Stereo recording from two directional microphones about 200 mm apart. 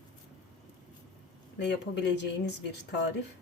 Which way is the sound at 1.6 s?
55° left (ahead or behind).